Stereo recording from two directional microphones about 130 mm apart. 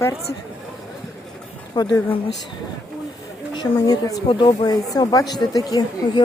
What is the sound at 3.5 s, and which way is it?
Speech, 30° left (ahead or behind).